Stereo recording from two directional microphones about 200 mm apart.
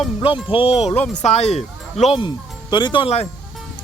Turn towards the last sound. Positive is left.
turn(degrees=30)  # may be behind; listen again after turning